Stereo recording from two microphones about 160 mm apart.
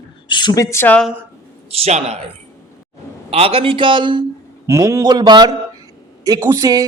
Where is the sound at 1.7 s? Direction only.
40° right (ahead or behind).